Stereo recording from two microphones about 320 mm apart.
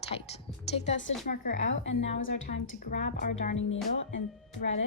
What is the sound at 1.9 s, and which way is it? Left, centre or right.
Speech, left.